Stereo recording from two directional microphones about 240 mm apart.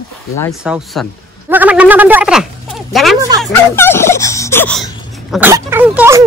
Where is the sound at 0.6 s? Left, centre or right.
Centre.